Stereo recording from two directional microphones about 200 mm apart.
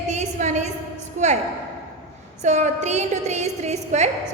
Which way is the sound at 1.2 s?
35° right (ahead or behind).